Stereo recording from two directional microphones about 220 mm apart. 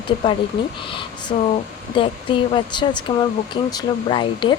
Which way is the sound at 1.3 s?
25° left (ahead or behind).